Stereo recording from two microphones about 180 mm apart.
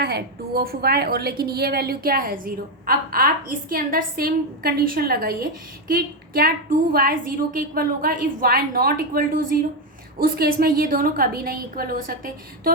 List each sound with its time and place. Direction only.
0.0 s a woman's voice: 60° right (ahead or behind)